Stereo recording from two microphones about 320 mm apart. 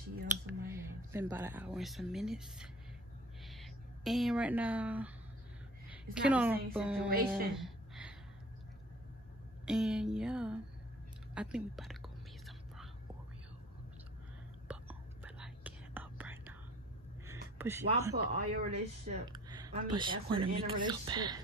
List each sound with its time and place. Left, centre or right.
0.5 s a woman's voice: centre
7.5 s a sound: centre
9.7 s speech: centre
14.7 s whispering: centre
17.3 s a sound: centre
18.1 s speech: right